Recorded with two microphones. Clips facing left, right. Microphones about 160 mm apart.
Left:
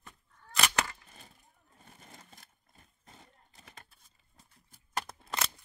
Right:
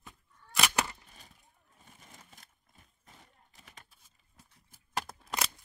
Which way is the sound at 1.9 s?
35° left (ahead or behind).